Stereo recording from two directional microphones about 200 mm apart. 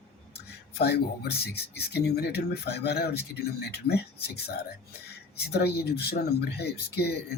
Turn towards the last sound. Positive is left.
turn(degrees=55)  # may be behind; listen again after turning